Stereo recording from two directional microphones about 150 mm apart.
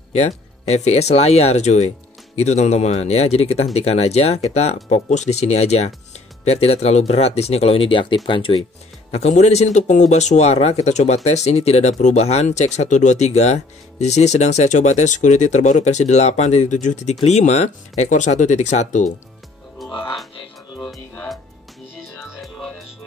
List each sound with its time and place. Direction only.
0.1 s speech: 50° left (ahead or behind)
9.4 s speech: 50° left (ahead or behind)
19.8 s music: centre (ahead or behind)
22.4 s music: centre (ahead or behind)